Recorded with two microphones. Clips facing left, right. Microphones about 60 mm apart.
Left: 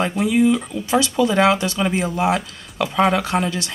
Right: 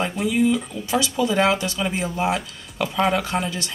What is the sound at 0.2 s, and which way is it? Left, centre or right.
Speech, centre.